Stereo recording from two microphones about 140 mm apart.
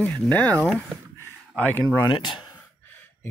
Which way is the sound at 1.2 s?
15° left (ahead or behind).